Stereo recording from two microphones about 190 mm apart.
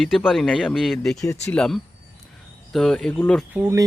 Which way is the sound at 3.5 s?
15° right (ahead or behind).